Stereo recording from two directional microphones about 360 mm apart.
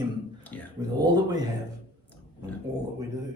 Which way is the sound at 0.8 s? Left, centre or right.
Centre.